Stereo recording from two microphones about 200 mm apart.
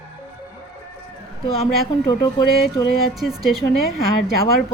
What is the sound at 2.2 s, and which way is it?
Speech, 15° left (ahead or behind).